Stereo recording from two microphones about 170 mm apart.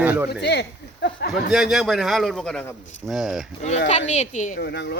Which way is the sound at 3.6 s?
40° left (ahead or behind).